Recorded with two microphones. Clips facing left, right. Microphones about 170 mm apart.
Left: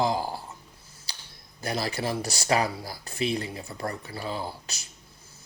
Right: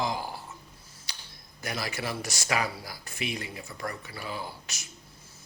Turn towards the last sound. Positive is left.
turn(degrees=35)  # may be behind; listen again after turning